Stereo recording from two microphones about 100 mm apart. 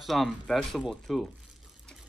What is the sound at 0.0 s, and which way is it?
Speech, centre (ahead or behind).